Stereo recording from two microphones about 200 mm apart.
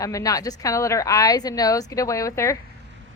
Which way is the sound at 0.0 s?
15° left (ahead or behind).